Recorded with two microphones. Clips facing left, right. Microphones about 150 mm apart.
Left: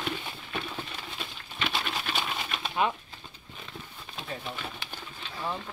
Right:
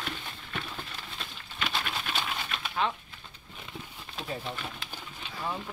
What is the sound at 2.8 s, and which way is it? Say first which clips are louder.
Speech: left 2 dB; 10° left (ahead or behind).